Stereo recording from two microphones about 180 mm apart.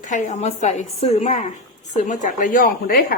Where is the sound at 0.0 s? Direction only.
40° left (ahead or behind).